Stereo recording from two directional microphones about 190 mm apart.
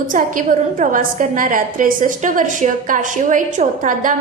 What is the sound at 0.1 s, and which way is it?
A woman's voice, 45° right (ahead or behind).